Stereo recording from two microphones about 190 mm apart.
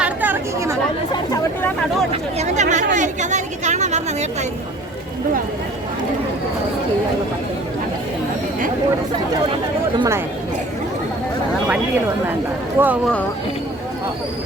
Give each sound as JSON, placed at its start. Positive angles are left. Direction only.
{"t": 0.0, "sound": "chatter", "side_deg": -10}
{"t": 1.1, "sound": "chatter", "side_deg": 20}
{"t": 2.4, "sound": "chatter", "side_deg": -40}
{"t": 12.8, "sound": "speech", "side_deg": -10}